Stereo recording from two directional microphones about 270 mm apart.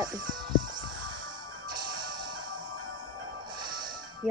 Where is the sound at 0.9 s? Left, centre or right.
Right.